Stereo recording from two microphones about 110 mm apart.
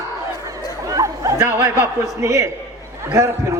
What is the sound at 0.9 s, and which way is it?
Chatter, 30° right (ahead or behind).